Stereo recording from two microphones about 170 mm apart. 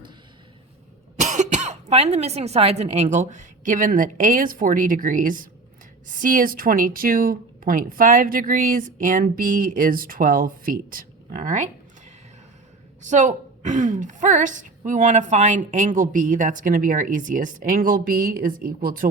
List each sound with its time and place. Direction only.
1.2 s speech: 45° right (ahead or behind)
13.0 s a woman's voice: 45° right (ahead or behind)